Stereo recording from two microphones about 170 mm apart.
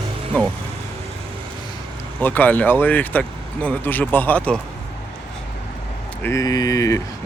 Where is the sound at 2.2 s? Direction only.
10° left (ahead or behind).